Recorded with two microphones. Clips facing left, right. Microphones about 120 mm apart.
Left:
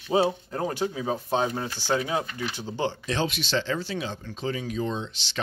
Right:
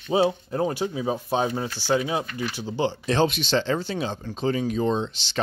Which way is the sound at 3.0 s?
30° right (ahead or behind).